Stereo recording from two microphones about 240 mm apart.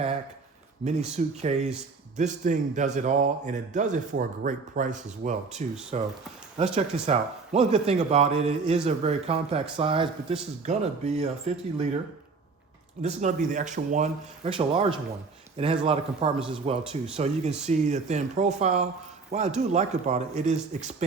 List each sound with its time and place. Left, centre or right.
0.9 s speech: right
13.0 s speech: right